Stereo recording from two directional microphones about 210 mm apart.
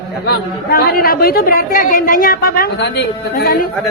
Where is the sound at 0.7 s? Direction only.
45° left (ahead or behind).